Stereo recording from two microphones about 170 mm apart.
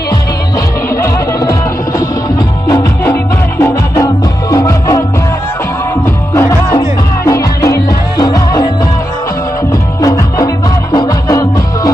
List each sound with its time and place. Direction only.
1.0 s music: 15° left (ahead or behind)
3.6 s music: 20° left (ahead or behind)
6.3 s music: 20° left (ahead or behind)
10.0 s music: 20° left (ahead or behind)